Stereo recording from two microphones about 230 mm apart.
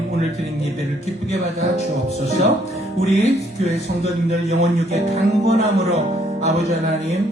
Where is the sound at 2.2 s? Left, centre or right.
Right.